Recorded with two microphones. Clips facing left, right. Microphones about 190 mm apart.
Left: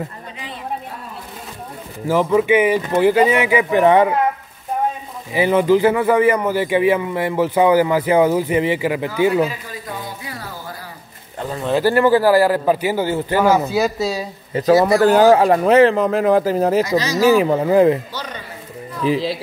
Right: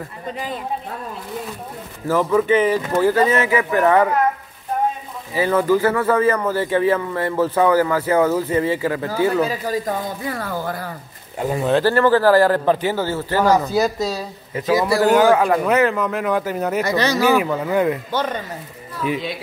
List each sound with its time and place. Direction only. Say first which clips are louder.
2.0 s a man's voice: left 2 dB; 10° left (ahead or behind)
5.3 s a man's voice: left 3 dB; 15° left (ahead or behind)
9.5 s a man's voice: right 8 dB; 45° right (ahead or behind)
11.3 s speech: right 4 dB; 15° right (ahead or behind)
11.8 s a man's voice: left 3 dB; 10° left (ahead or behind)
14.5 s speech: left 4 dB; 30° left (ahead or behind)
16.8 s speech: even; 60° right (ahead or behind)
17.2 s speech: left 4 dB; 30° left (ahead or behind)
18.1 s a man's voice: right 8 dB; 50° right (ahead or behind)
19.0 s speech: left 5 dB; 30° left (ahead or behind)